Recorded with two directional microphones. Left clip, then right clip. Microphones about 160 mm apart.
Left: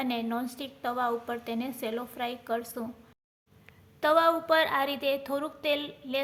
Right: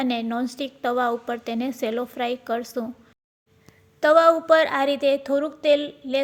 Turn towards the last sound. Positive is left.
turn(degrees=-30)  # may be behind; listen again after turning